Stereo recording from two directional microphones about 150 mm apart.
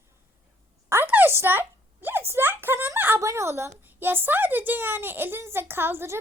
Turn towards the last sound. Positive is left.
turn(degrees=-15)  # may be behind; listen again after turning